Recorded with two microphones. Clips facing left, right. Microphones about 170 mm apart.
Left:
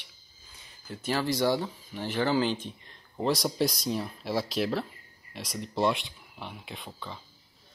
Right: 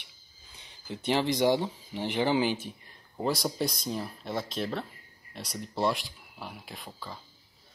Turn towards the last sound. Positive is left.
turn(degrees=0)  # may be behind; listen again after turning